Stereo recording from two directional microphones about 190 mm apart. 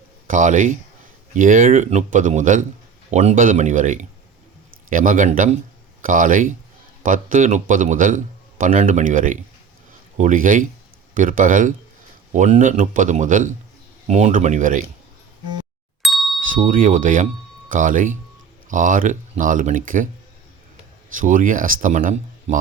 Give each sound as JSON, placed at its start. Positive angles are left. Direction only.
{"t": 0.3, "sound": "a man's voice", "side_deg": -40}
{"t": 16.0, "sound": "bicycle bell", "side_deg": 0}
{"t": 16.4, "sound": "a man's voice", "side_deg": -45}
{"t": 21.2, "sound": "a man's voice", "side_deg": -45}